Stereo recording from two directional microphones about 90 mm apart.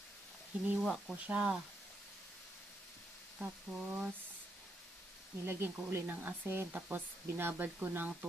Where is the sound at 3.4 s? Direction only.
10° right (ahead or behind).